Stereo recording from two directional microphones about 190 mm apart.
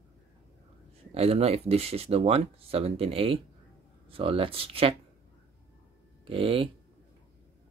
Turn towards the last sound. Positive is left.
turn(degrees=-30)  # may be behind; listen again after turning